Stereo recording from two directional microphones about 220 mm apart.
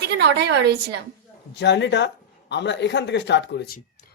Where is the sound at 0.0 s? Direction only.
50° right (ahead or behind).